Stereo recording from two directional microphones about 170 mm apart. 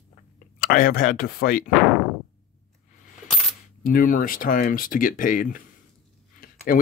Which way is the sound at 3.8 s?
55° left (ahead or behind).